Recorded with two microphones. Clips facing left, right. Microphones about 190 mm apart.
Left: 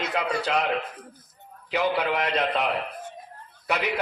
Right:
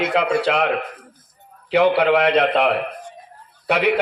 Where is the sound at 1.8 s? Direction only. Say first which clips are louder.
Right 9 dB; 65° right (ahead or behind).